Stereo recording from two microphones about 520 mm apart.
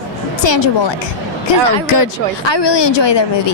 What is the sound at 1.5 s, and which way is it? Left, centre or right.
A woman's voice, left.